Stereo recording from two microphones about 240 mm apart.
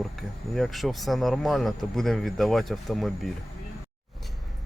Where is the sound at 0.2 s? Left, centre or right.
Centre.